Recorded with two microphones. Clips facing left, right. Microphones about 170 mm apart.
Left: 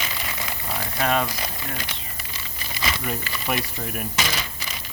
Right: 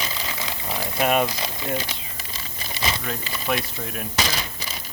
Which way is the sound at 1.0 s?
15° right (ahead or behind).